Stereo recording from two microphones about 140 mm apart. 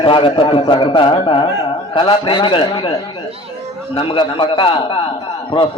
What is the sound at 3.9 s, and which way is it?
A man's voice, 35° left (ahead or behind).